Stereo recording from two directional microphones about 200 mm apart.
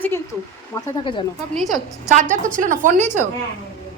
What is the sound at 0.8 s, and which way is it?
Speech, 20° left (ahead or behind).